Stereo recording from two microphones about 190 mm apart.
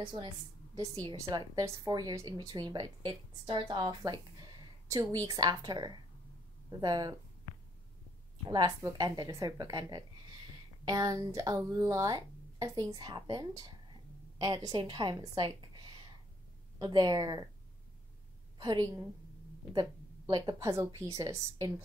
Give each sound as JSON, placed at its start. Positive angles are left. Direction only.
{"t": 0.0, "sound": "a woman's voice", "side_deg": -25}
{"t": 8.5, "sound": "a woman's voice", "side_deg": -20}
{"t": 18.6, "sound": "a woman's voice", "side_deg": -25}